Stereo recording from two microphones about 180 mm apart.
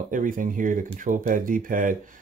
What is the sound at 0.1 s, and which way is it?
Speech, 45° right (ahead or behind).